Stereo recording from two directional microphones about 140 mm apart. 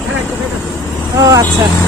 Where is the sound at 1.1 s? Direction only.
25° right (ahead or behind).